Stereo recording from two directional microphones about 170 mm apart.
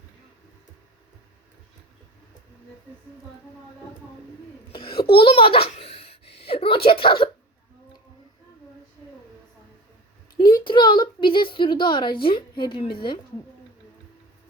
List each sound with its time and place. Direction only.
4.7 s a sound: 30° left (ahead or behind)
6.5 s speech: 30° left (ahead or behind)
10.6 s a woman's voice: 30° left (ahead or behind)